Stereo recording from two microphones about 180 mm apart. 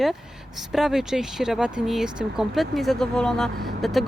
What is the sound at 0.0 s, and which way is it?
Speech, centre (ahead or behind).